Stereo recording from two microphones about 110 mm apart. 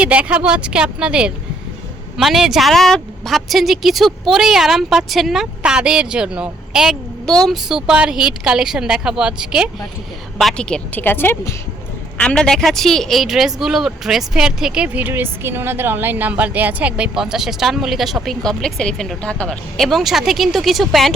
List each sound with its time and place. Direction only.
0.0 s a woman's voice: 10° right (ahead or behind)
7.3 s a woman's voice: 5° left (ahead or behind)
10.3 s a woman's voice: 5° left (ahead or behind)
12.1 s a woman's voice: 10° left (ahead or behind)